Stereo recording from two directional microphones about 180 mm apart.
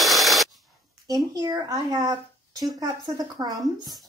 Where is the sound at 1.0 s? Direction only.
20° right (ahead or behind).